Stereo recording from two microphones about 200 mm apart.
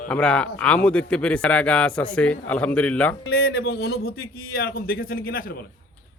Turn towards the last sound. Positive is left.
turn(degrees=45)  # may be behind; listen again after turning